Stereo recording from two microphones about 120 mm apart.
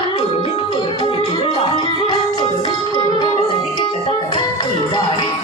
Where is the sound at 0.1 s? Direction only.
50° left (ahead or behind).